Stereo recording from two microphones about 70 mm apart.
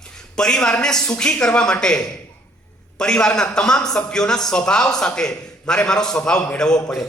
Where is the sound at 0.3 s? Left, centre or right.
Centre.